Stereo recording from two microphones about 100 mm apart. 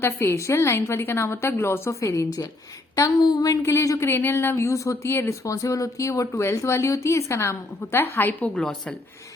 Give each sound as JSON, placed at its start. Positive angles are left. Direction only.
{"t": 0.0, "sound": "speech", "side_deg": 25}
{"t": 2.9, "sound": "a sound", "side_deg": 40}
{"t": 3.6, "sound": "speech", "side_deg": 30}
{"t": 8.5, "sound": "a woman's voice", "side_deg": 5}